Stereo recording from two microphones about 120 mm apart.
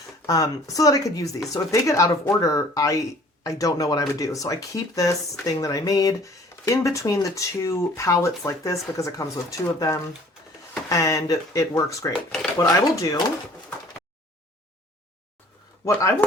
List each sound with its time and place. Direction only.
0.3 s speech: 30° left (ahead or behind)
15.9 s speech: 25° left (ahead or behind)